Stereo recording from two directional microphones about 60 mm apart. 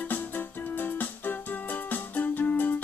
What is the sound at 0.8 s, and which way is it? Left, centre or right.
Music, left.